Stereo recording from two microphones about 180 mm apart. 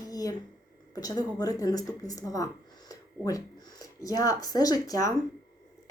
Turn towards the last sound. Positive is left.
turn(degrees=20)  # may be behind; listen again after turning